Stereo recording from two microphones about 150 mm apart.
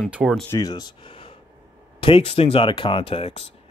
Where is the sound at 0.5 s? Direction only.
25° left (ahead or behind).